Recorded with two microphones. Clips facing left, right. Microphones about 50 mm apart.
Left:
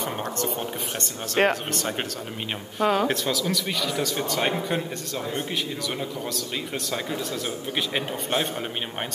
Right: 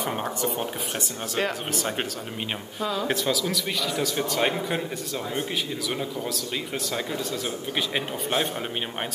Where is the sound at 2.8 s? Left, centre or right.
Left.